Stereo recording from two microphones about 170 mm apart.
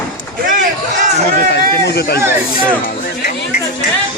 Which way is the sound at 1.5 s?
75° left (ahead or behind).